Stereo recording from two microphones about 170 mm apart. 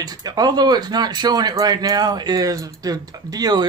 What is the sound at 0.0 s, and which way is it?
Speech, 20° right (ahead or behind).